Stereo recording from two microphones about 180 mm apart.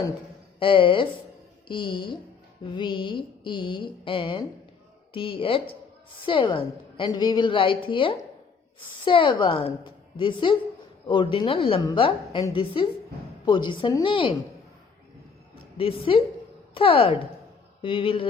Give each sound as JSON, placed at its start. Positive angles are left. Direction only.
{"t": 0.6, "sound": "a woman's voice", "side_deg": 30}
{"t": 15.8, "sound": "a woman's voice", "side_deg": 30}